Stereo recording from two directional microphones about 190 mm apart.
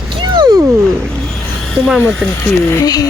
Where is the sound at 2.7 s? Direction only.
20° left (ahead or behind).